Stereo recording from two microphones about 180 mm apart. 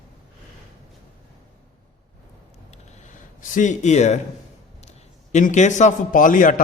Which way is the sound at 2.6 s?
45° left (ahead or behind).